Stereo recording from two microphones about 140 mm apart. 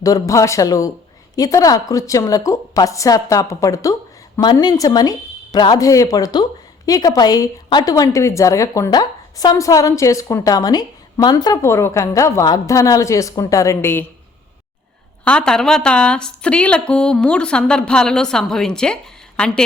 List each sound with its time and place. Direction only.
0.0 s a woman's voice: 25° left (ahead or behind)
15.2 s a woman's voice: 5° left (ahead or behind)